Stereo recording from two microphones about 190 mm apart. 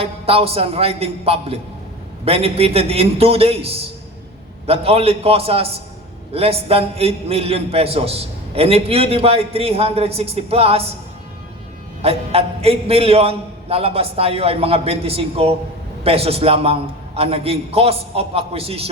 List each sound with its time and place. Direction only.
0.0 s a man's voice: 30° right (ahead or behind)
12.0 s a man's voice: 30° right (ahead or behind)